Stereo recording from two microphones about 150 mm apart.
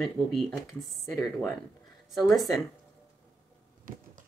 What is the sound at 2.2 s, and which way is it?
Speech, centre (ahead or behind).